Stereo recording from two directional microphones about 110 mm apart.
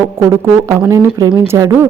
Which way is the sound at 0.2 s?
20° right (ahead or behind).